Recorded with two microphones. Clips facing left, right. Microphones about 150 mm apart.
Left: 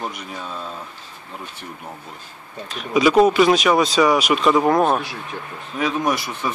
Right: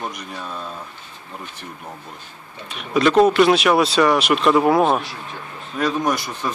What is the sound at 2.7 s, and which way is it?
Speech, centre (ahead or behind).